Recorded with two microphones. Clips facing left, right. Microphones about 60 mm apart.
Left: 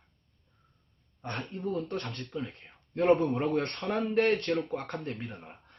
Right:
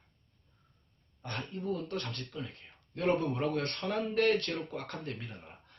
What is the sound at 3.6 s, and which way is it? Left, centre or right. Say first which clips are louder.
Speech: left 2 dB; left.